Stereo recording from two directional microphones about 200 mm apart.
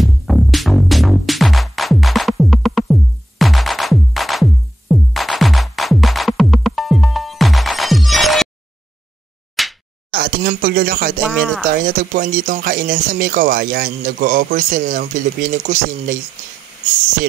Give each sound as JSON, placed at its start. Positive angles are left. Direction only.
{"t": 0.0, "sound": "music", "side_deg": 0}
{"t": 9.6, "sound": "slap", "side_deg": 0}
{"t": 10.1, "sound": "a sound", "side_deg": -50}
{"t": 11.2, "sound": "speech", "side_deg": 0}
{"t": 11.6, "sound": "speech", "side_deg": -45}